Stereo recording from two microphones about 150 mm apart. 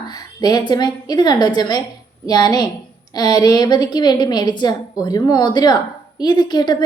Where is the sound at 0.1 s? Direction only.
25° left (ahead or behind).